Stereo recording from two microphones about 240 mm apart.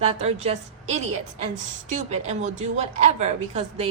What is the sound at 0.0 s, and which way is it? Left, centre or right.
A woman's voice, right.